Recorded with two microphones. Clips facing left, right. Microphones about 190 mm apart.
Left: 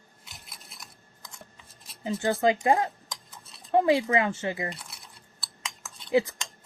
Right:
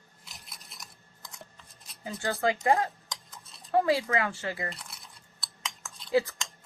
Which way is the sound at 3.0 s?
Centre (ahead or behind).